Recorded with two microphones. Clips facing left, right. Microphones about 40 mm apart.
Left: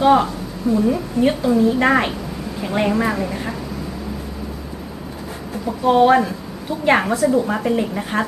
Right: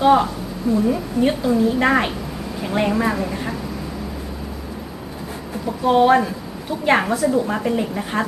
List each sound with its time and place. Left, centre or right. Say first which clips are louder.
0.0 s a woman's voice: left 1 dB; centre
5.6 s a woman's voice: left 1 dB; centre